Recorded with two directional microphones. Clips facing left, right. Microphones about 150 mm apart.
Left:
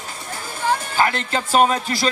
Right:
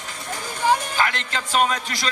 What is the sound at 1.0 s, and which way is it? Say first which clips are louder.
A man's voice: left 4 dB; 35° left (ahead or behind).